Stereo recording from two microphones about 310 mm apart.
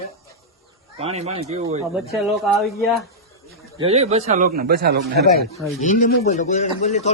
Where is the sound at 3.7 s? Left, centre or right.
Centre.